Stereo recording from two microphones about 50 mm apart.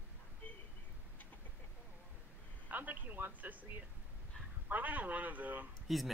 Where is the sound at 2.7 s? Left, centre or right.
Right.